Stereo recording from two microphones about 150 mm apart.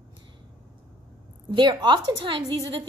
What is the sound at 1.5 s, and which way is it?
A woman's voice, 30° right (ahead or behind).